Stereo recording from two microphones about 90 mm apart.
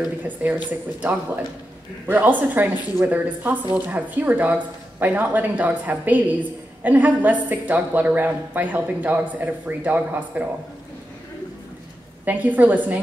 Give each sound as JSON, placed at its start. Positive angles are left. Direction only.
{"t": 0.4, "sound": "speech", "side_deg": -20}
{"t": 12.3, "sound": "speech", "side_deg": -20}